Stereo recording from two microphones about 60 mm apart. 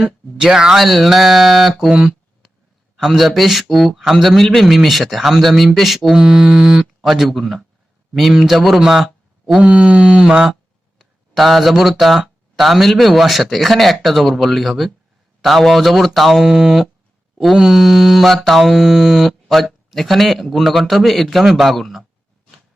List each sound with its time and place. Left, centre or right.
0.3 s speech: centre
0.9 s mantra: centre
1.9 s speech: centre
2.9 s mantra: centre
9.6 s speech: centre
10.9 s speech: centre
12.5 s mantra: centre